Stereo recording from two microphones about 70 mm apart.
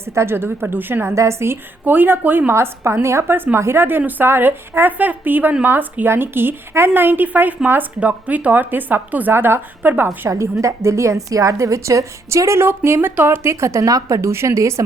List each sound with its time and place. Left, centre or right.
0.0 s a woman's voice: right
1.1 s a woman's voice: right
1.8 s a woman's voice: right
2.5 s a woman's voice: right
10.2 s a woman's voice: right